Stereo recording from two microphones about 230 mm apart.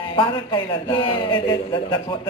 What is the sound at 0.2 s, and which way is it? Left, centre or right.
Speech, centre.